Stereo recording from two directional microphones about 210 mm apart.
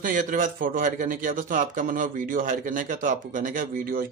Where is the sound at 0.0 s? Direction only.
40° right (ahead or behind).